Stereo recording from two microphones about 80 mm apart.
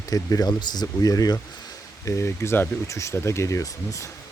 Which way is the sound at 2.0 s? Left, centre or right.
Left.